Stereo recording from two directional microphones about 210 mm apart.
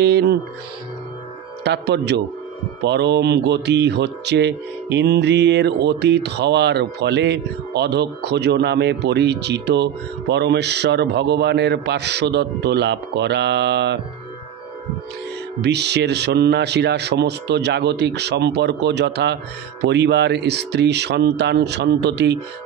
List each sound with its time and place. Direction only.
0.0 s speech: 50° right (ahead or behind)
1.6 s speech: 55° right (ahead or behind)
15.6 s speech: 55° right (ahead or behind)